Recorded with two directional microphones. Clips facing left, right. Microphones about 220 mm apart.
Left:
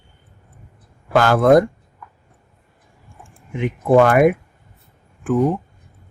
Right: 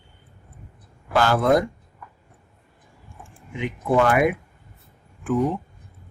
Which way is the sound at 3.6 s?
45° left (ahead or behind).